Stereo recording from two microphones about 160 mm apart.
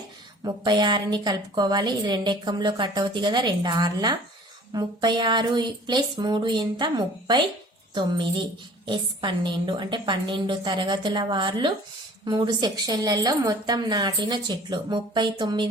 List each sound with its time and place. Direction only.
0.4 s a woman's voice: 25° right (ahead or behind)
8.9 s a woman's voice: 30° right (ahead or behind)